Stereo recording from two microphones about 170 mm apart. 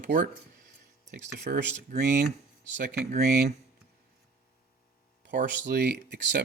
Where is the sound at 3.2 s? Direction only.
65° right (ahead or behind).